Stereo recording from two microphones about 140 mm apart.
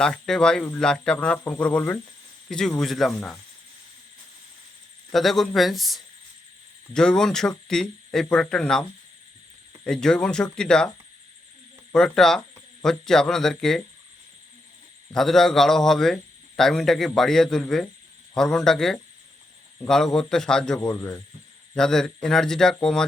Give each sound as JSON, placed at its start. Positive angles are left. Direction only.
{"t": 0.0, "sound": "a man's voice", "side_deg": 5}
{"t": 5.1, "sound": "a man's voice", "side_deg": 0}
{"t": 9.8, "sound": "a man's voice", "side_deg": 5}
{"t": 11.9, "sound": "a man's voice", "side_deg": 5}
{"t": 15.1, "sound": "a man's voice", "side_deg": 5}
{"t": 20.9, "sound": "speech", "side_deg": 20}
{"t": 21.8, "sound": "a man's voice", "side_deg": 5}